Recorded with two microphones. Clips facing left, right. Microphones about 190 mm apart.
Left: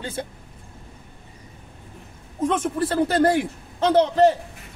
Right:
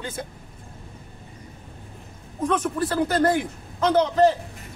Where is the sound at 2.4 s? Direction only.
25° left (ahead or behind).